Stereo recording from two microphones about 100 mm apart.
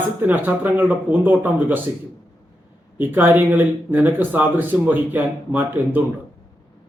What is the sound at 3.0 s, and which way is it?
Speech, 20° right (ahead or behind).